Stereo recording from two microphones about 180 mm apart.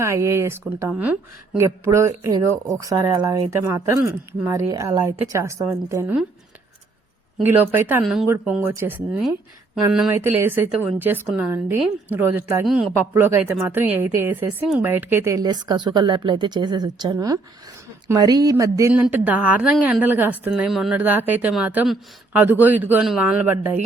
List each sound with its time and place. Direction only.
0.0 s a woman's voice: 15° right (ahead or behind)
7.4 s a woman's voice: 10° right (ahead or behind)
8.0 s a woman's voice: centre (ahead or behind)